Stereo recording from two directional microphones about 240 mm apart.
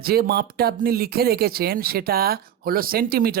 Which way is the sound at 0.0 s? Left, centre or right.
Right.